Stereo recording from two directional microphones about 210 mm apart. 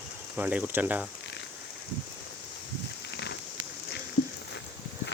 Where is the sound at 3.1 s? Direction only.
55° left (ahead or behind).